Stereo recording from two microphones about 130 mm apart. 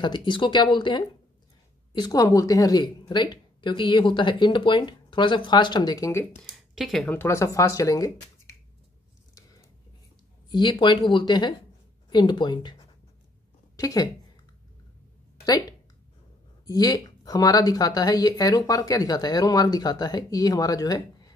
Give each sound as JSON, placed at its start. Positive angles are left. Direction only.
{"t": 0.0, "sound": "speech", "side_deg": 35}
{"t": 6.7, "sound": "speech", "side_deg": 0}
{"t": 7.1, "sound": "speech", "side_deg": 20}
{"t": 10.5, "sound": "a woman's voice", "side_deg": 35}
{"t": 16.6, "sound": "speech", "side_deg": 30}